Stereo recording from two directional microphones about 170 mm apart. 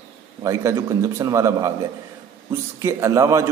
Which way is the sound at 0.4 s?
20° right (ahead or behind).